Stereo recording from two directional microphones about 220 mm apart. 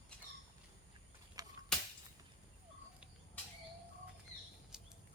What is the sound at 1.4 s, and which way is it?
Whip, 15° right (ahead or behind).